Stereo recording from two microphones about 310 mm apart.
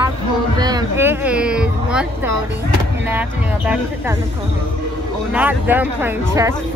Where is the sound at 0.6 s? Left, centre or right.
Centre.